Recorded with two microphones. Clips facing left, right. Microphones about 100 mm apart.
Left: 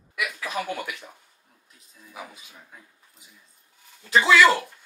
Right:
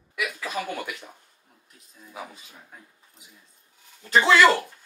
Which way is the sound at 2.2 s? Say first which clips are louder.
Right 1 dB; 5° left (ahead or behind).